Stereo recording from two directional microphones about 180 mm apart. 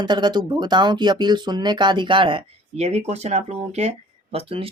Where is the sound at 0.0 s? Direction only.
25° right (ahead or behind).